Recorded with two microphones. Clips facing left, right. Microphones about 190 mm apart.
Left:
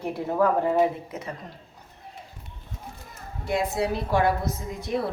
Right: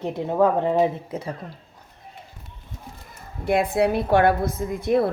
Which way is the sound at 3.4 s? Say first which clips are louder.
Right 6 dB; 55° right (ahead or behind).